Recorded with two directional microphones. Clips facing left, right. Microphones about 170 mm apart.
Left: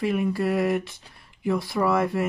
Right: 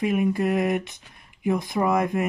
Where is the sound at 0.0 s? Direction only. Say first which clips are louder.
Right 2 dB; 15° right (ahead or behind).